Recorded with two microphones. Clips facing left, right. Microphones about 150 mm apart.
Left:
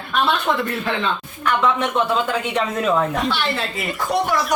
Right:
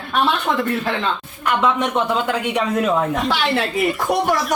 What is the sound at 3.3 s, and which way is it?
Speech, 90° right.